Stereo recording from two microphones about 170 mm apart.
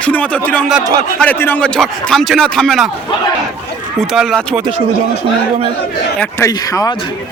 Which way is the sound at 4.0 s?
Centre (ahead or behind).